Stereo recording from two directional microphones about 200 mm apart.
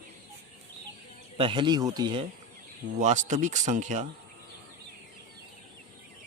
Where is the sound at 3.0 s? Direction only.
40° right (ahead or behind).